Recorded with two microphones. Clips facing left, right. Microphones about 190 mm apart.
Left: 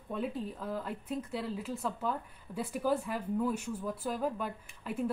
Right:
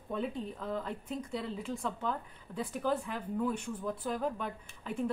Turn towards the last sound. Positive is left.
turn(degrees=5)  # may be behind; listen again after turning